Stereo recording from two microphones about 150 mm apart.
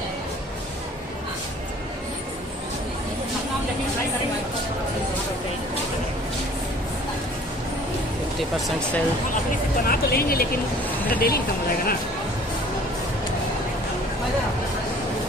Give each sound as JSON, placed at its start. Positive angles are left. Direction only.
{"t": 8.4, "sound": "speech", "side_deg": 0}
{"t": 9.8, "sound": "speech", "side_deg": 80}